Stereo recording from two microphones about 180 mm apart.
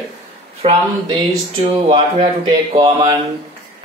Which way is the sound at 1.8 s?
30° right (ahead or behind).